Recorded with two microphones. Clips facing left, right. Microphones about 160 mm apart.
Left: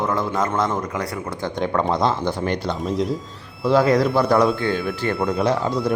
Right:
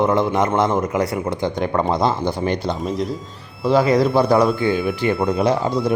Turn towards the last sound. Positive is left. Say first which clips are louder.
# right 2 dB
turn(degrees=-15)  # may be behind; listen again after turning